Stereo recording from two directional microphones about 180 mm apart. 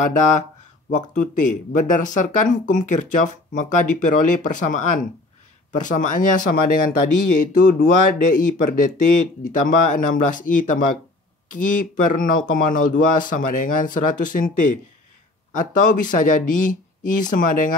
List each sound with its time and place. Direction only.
0.0 s speech: 45° left (ahead or behind)
7.8 s speech: 45° left (ahead or behind)